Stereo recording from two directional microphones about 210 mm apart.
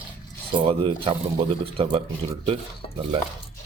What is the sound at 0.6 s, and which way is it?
Speech, 25° right (ahead or behind).